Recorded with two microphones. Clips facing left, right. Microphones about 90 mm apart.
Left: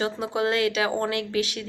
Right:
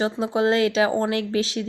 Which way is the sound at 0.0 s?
30° right (ahead or behind).